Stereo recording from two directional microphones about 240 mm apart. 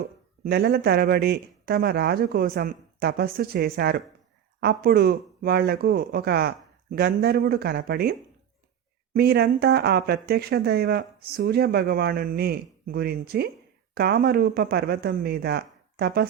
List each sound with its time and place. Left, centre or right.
0.0 s speech: right
9.1 s speech: right